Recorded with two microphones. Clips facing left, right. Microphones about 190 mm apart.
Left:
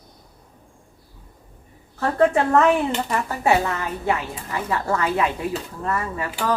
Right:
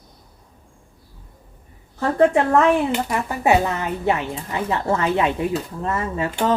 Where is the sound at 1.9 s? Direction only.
15° right (ahead or behind).